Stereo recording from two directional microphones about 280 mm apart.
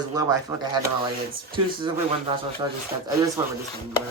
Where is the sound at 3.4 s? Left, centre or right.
Centre.